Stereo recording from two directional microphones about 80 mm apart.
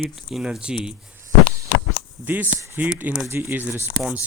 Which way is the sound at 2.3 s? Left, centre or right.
Right.